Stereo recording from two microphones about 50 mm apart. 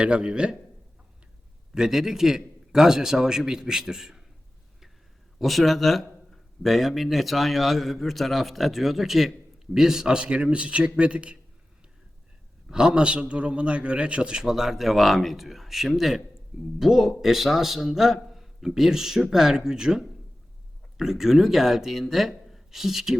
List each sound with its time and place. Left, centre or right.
0.0 s speech: right
1.7 s a man's voice: centre
5.4 s a man's voice: centre; by 11.3 s right
12.7 s a man's voice: centre